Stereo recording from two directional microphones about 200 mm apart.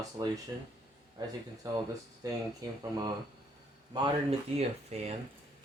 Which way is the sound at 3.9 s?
20° right (ahead or behind).